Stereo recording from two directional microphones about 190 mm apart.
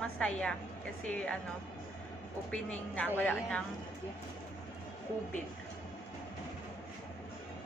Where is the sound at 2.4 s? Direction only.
5° left (ahead or behind).